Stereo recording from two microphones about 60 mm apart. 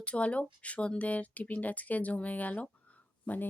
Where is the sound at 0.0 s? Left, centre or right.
Left.